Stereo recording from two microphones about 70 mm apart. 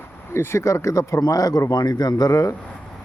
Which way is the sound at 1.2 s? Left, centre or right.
Left.